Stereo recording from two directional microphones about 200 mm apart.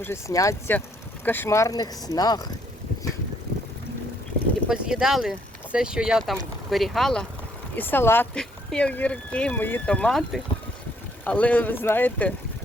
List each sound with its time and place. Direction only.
0.0 s speech: 15° left (ahead or behind)
4.7 s speech: 5° right (ahead or behind)